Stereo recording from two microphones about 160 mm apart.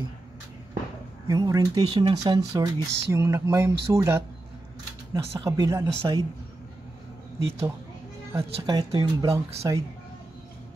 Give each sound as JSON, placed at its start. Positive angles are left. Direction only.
{"t": 1.2, "sound": "speech", "side_deg": -25}
{"t": 8.3, "sound": "speech", "side_deg": -20}